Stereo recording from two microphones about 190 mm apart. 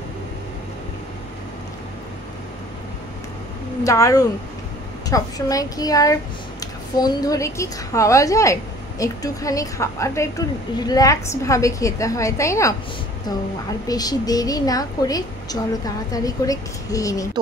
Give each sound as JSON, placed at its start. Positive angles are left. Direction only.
{"t": 3.8, "sound": "a woman's voice", "side_deg": 15}
{"t": 13.8, "sound": "a woman's voice", "side_deg": 20}